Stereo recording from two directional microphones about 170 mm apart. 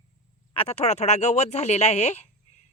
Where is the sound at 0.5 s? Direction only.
40° left (ahead or behind).